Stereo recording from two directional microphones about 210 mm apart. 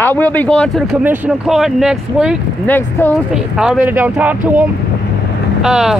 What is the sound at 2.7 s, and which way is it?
Speech, 10° left (ahead or behind).